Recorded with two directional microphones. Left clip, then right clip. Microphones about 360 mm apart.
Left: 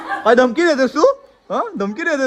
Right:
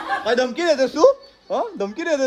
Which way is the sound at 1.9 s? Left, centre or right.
Centre.